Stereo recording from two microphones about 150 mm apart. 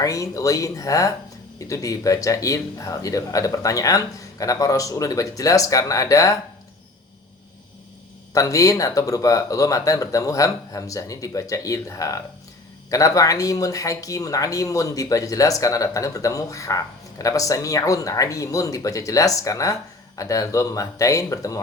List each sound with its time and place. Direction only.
0.0 s speech: 25° left (ahead or behind)
8.3 s speech: 20° left (ahead or behind)